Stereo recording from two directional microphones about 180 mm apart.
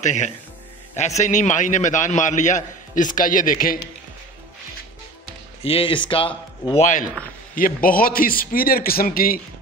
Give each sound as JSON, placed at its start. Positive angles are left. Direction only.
{"t": 0.0, "sound": "a man's voice", "side_deg": 40}
{"t": 5.6, "sound": "a man's voice", "side_deg": 30}